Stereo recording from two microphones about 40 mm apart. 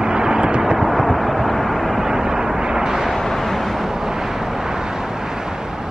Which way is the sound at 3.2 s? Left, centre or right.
Centre.